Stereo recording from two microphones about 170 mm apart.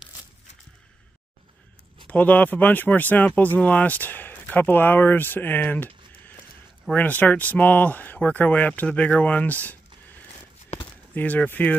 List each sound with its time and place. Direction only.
2.0 s speech: 10° left (ahead or behind)
11.1 s speech: 10° left (ahead or behind)